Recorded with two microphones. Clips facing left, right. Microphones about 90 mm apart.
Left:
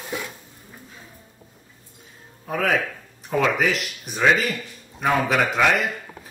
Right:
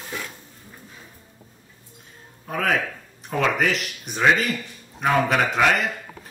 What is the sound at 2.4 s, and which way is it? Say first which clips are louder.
Speech: left 1 dB; centre (ahead or behind).